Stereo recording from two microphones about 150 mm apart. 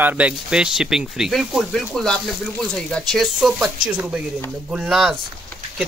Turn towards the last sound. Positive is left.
turn(degrees=0)  # may be behind; listen again after turning